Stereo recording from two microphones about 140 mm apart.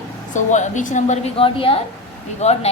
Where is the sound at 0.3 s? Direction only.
60° left (ahead or behind).